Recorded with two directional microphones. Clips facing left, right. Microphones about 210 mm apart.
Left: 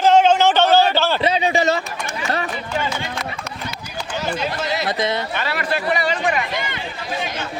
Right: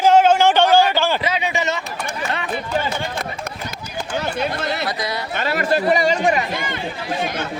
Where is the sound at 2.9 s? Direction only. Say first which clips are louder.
Right 1 dB; 55° right (ahead or behind).